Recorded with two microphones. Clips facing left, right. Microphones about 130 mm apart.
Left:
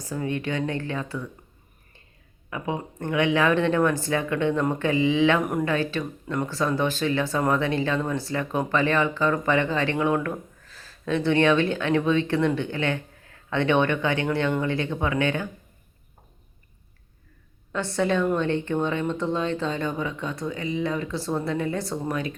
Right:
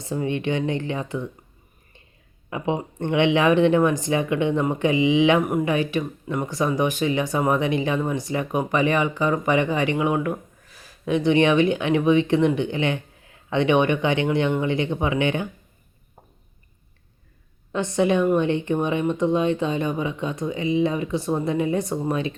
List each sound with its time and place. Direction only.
0.0 s speech: 20° right (ahead or behind)
2.5 s speech: 20° right (ahead or behind)
17.7 s a woman's voice: 20° right (ahead or behind)